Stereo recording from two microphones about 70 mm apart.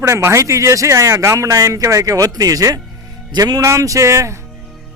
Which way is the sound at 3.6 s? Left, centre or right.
Right.